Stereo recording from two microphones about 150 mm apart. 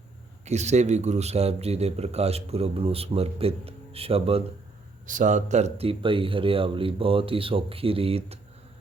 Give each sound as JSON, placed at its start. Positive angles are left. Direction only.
{"t": 0.4, "sound": "a man's voice", "side_deg": -50}
{"t": 5.0, "sound": "speech", "side_deg": -60}